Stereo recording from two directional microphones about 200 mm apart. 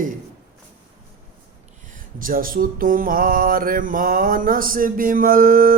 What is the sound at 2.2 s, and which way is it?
Mantra, 45° right (ahead or behind).